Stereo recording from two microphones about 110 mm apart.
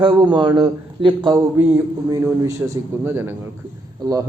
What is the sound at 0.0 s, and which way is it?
A man's voice, 45° right (ahead or behind).